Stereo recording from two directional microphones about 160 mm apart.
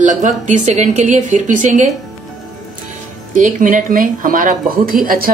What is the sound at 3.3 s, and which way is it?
A woman's voice, 55° right (ahead or behind).